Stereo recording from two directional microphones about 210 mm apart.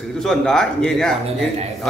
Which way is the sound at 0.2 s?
5° left (ahead or behind).